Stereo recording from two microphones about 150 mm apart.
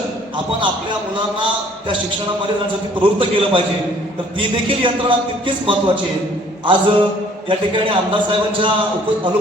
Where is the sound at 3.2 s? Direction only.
35° right (ahead or behind).